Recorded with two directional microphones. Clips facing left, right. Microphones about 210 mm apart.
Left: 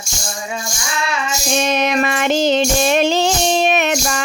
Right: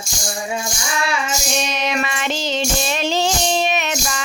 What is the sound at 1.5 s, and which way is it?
Female singing, 55° left (ahead or behind).